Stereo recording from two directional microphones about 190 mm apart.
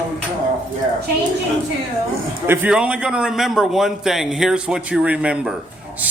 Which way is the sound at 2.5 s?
5° right (ahead or behind).